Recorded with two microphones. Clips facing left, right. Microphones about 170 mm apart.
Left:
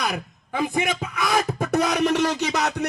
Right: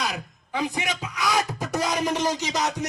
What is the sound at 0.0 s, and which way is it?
Speech, 55° left (ahead or behind).